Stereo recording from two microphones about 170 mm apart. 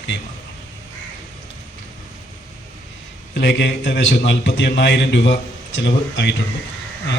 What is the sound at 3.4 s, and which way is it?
A man's voice, 90° left.